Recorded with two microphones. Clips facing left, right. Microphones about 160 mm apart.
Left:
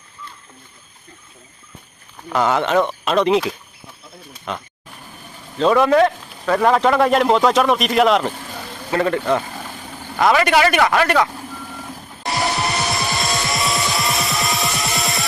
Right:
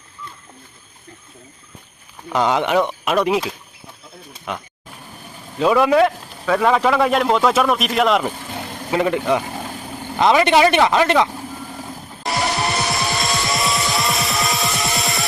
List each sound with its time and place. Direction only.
2.3 s a man's voice: 15° right (ahead or behind); by 8.3 s centre (ahead or behind)
8.5 s vehicle: 15° right (ahead or behind)
10.0 s speech: 20° right (ahead or behind)
12.9 s music: centre (ahead or behind)